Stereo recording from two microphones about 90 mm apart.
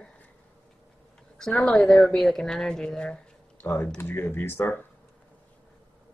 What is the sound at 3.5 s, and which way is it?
Speech, 20° left (ahead or behind).